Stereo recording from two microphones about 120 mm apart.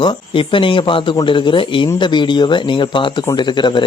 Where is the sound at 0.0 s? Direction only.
45° left (ahead or behind).